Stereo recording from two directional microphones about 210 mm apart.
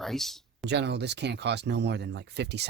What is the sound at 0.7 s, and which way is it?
Speech, 55° right (ahead or behind).